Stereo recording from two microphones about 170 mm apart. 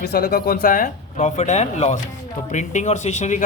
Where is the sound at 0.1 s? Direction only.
65° left (ahead or behind).